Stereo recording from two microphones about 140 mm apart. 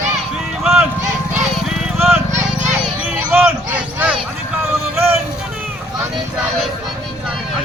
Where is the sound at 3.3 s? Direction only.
15° right (ahead or behind).